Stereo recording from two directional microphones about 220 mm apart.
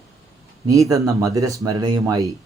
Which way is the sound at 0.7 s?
15° right (ahead or behind).